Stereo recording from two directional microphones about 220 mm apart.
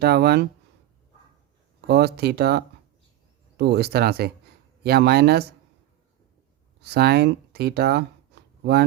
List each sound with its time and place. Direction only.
0.0 s speech: 45° right (ahead or behind)
1.9 s speech: 45° right (ahead or behind)
6.8 s speech: 45° right (ahead or behind)